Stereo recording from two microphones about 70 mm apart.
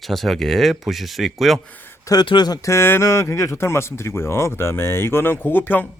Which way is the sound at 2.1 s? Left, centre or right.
Left.